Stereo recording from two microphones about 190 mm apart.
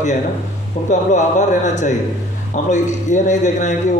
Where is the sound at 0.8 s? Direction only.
40° left (ahead or behind).